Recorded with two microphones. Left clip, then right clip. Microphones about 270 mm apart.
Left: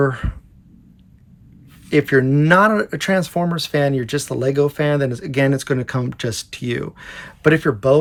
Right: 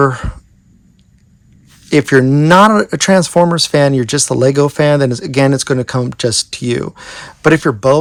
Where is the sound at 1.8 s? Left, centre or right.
Right.